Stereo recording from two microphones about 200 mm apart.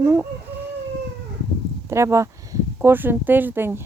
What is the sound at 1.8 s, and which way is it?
Speech, 15° right (ahead or behind).